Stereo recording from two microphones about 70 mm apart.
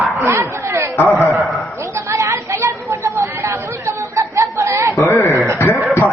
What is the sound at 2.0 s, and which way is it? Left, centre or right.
Chatter, right.